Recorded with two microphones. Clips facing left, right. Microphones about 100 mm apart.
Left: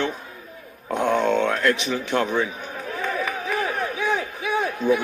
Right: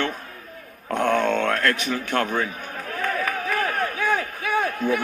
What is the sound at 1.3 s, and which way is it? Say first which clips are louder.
Speech: left 2 dB; 50° right (ahead or behind).